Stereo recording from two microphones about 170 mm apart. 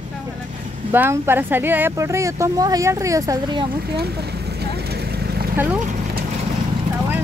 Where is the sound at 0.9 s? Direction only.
15° right (ahead or behind).